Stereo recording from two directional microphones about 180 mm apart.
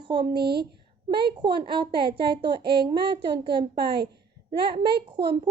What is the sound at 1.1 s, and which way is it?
A woman's voice, 25° right (ahead or behind).